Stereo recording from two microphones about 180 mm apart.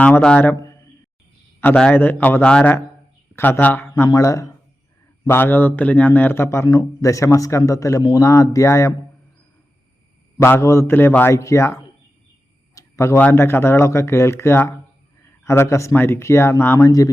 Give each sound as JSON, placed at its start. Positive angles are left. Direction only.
{"t": 0.0, "sound": "a man's voice", "side_deg": 5}
{"t": 10.4, "sound": "a man's voice", "side_deg": 15}